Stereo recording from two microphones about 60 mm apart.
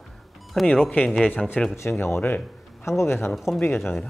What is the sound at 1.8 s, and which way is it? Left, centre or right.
Speech, left.